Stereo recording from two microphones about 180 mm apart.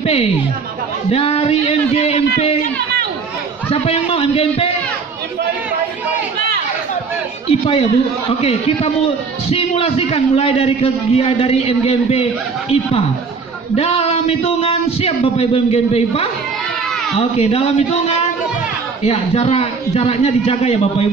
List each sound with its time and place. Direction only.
0.0 s a man's voice: 35° left (ahead or behind)
3.7 s a man's voice: 35° left (ahead or behind)
7.6 s a man's voice: 35° left (ahead or behind)
17.4 s a man's voice: 30° left (ahead or behind)
19.0 s a man's voice: 35° left (ahead or behind)